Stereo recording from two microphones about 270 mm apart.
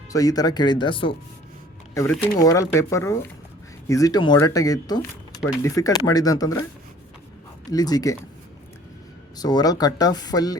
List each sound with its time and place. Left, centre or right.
0.1 s speech: centre
2.0 s speech: centre
7.7 s speech: centre
9.4 s speech: centre